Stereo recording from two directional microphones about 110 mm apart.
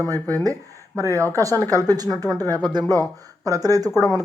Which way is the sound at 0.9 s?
25° right (ahead or behind).